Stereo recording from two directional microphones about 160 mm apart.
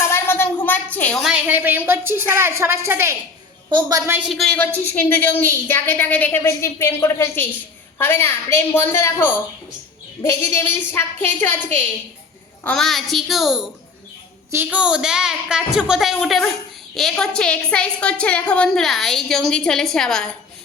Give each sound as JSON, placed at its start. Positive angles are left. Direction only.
{"t": 0.1, "sound": "a sound", "side_deg": 15}
{"t": 1.2, "sound": "a woman's voice", "side_deg": -5}
{"t": 3.7, "sound": "a woman's voice", "side_deg": -25}
{"t": 4.3, "sound": "a woman's voice", "side_deg": 5}